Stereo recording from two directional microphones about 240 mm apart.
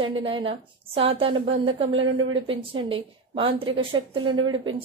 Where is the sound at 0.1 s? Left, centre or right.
Right.